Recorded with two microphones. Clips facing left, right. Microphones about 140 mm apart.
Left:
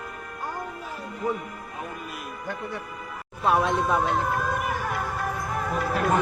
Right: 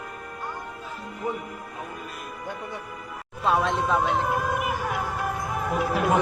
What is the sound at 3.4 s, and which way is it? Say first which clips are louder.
Speech: left 1 dB; 5° left (ahead or behind).